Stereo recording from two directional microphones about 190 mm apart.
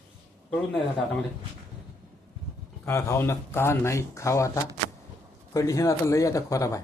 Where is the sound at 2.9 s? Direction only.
15° left (ahead or behind).